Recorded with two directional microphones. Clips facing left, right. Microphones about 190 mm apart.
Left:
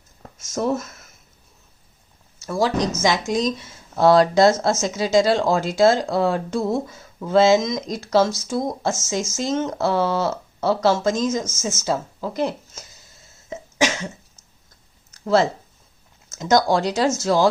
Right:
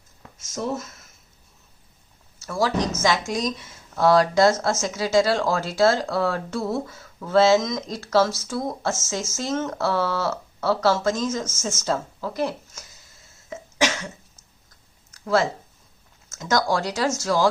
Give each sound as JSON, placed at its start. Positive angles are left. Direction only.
{"t": 2.4, "sound": "a woman's voice", "side_deg": 20}
{"t": 13.5, "sound": "cough", "side_deg": 20}
{"t": 15.2, "sound": "a woman's voice", "side_deg": 25}